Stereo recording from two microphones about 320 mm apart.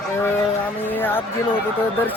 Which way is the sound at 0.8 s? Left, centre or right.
Centre.